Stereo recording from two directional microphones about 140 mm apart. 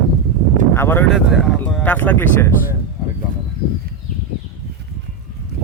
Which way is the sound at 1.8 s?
10° left (ahead or behind).